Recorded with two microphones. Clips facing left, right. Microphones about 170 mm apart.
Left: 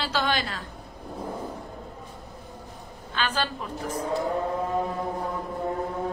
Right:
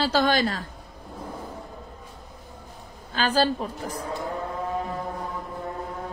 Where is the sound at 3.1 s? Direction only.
35° right (ahead or behind).